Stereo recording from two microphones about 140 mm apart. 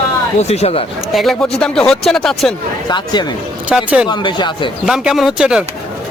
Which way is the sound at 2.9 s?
30° left (ahead or behind).